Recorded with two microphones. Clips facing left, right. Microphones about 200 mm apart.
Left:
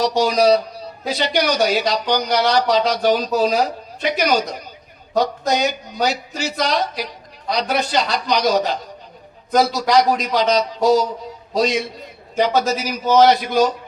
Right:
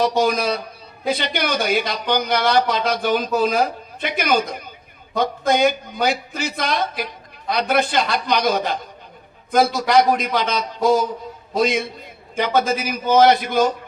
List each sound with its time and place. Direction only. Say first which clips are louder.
0.0 s a man's voice: left 3 dB; 55° right (ahead or behind)